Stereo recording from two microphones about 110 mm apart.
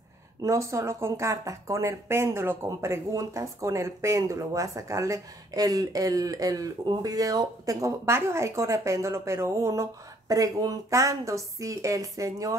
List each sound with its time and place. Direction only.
0.4 s speech: 30° right (ahead or behind)